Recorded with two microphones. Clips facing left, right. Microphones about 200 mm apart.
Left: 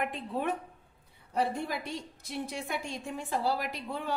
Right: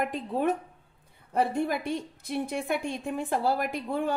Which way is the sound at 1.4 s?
55° right (ahead or behind).